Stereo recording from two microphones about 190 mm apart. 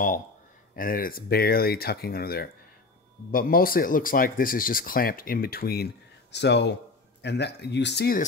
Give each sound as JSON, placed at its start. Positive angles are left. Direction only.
{"t": 0.7, "sound": "speech", "side_deg": 50}
{"t": 6.3, "sound": "speech", "side_deg": 65}